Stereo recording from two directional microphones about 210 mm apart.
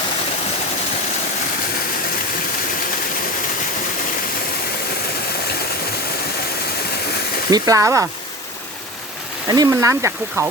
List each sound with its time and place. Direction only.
7.5 s speech: 15° right (ahead or behind)
9.5 s speech: 15° right (ahead or behind)